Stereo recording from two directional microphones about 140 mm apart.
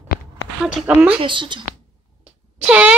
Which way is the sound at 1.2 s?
35° right (ahead or behind).